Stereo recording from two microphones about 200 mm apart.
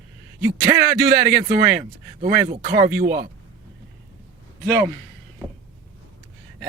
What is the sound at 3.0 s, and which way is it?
Speech, 50° right (ahead or behind).